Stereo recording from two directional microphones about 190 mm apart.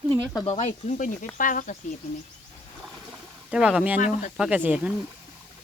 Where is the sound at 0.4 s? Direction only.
30° left (ahead or behind).